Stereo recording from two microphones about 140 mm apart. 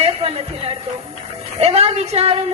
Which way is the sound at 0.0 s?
45° right (ahead or behind).